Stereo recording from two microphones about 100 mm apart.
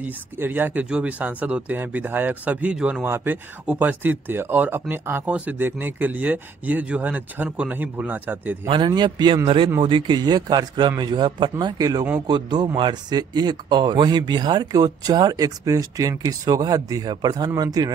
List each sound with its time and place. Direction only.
0.0 s speech: 20° right (ahead or behind)
8.6 s speech: 55° right (ahead or behind)
11.6 s speech: 35° right (ahead or behind)